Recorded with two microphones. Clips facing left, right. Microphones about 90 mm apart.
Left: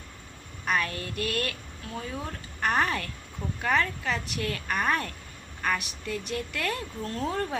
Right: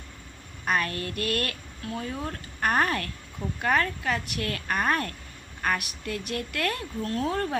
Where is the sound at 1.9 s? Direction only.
5° left (ahead or behind).